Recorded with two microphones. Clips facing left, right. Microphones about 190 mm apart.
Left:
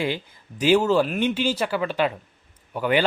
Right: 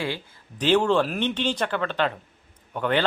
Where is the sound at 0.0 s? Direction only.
15° left (ahead or behind).